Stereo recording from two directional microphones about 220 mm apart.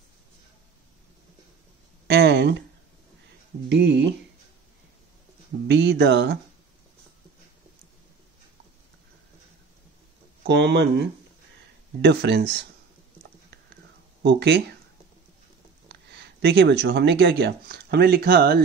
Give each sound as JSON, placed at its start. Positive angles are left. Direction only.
{"t": 2.0, "sound": "a sound", "side_deg": -50}
{"t": 3.6, "sound": "speech", "side_deg": -50}
{"t": 5.7, "sound": "speech", "side_deg": -50}
{"t": 10.4, "sound": "speech", "side_deg": -50}
{"t": 14.2, "sound": "speech", "side_deg": -50}
{"t": 15.9, "sound": "speech", "side_deg": -50}